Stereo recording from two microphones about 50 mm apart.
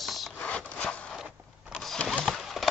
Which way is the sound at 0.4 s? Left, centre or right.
Left.